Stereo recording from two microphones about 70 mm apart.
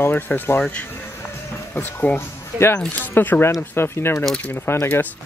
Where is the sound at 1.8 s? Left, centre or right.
Left.